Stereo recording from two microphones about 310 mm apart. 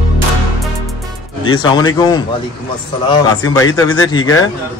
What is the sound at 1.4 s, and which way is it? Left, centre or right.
A man's voice, centre.